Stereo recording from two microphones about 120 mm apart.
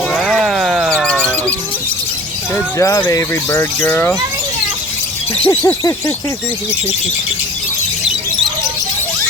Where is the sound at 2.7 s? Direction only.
30° left (ahead or behind).